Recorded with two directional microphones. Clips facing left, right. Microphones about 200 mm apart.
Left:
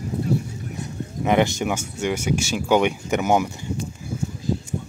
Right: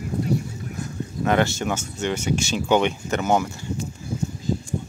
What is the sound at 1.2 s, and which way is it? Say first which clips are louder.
Speech: left 2 dB; 15° left (ahead or behind).